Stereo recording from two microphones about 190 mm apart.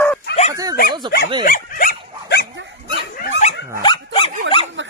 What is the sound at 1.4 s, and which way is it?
Dog, 50° left (ahead or behind).